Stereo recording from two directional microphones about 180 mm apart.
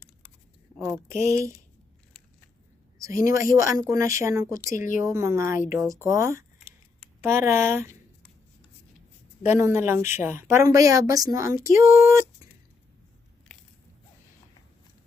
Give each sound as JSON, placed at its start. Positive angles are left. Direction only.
{"t": 0.8, "sound": "speech", "side_deg": -10}
{"t": 3.0, "sound": "speech", "side_deg": -15}
{"t": 4.7, "sound": "speech", "side_deg": 45}
{"t": 4.9, "sound": "speech", "side_deg": -15}
{"t": 9.5, "sound": "speech", "side_deg": -15}